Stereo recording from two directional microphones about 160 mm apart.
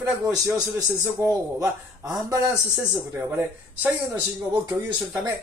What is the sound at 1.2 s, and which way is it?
Speech, 20° right (ahead or behind).